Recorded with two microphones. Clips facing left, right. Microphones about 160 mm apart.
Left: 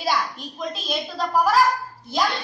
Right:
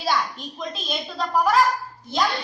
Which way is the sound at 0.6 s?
Centre (ahead or behind).